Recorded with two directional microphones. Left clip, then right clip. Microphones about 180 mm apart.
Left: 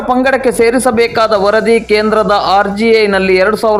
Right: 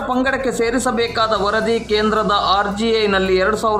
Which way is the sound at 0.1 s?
25° left (ahead or behind).